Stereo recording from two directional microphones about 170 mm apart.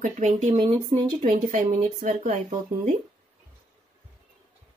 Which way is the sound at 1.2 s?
50° right (ahead or behind).